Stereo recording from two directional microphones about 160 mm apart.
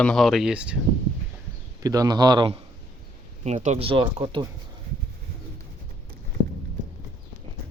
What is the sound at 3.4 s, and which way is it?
Speech, 45° right (ahead or behind).